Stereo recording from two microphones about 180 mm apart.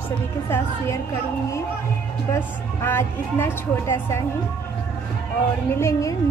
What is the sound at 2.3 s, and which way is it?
Speech, 10° left (ahead or behind).